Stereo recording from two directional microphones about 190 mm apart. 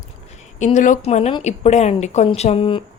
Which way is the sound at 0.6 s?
40° left (ahead or behind).